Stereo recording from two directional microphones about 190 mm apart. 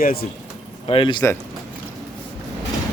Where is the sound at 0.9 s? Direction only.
25° left (ahead or behind).